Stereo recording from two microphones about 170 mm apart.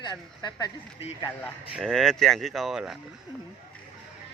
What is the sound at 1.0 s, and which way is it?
Speech, 35° left (ahead or behind).